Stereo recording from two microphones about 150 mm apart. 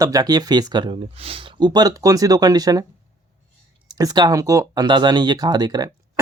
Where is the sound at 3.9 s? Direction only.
25° right (ahead or behind).